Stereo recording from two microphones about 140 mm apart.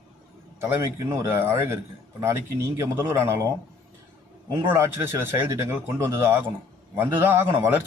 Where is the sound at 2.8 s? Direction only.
20° right (ahead or behind).